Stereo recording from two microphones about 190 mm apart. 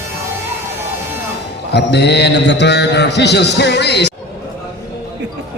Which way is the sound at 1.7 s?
60° left (ahead or behind).